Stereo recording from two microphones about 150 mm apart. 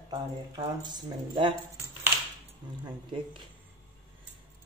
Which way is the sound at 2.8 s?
35° right (ahead or behind).